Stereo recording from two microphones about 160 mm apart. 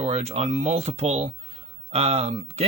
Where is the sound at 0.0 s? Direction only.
40° right (ahead or behind).